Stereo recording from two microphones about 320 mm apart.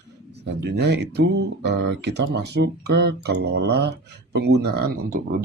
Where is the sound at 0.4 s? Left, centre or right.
Right.